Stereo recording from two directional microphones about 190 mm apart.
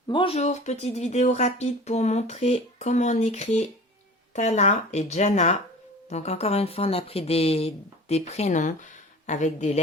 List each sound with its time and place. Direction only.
0.1 s speech: 25° left (ahead or behind)